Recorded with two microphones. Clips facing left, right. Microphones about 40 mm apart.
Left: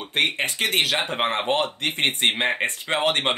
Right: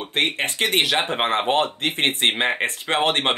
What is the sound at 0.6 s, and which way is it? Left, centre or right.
Speech, centre.